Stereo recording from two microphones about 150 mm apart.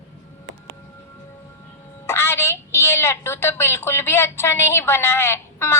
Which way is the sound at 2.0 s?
15° left (ahead or behind).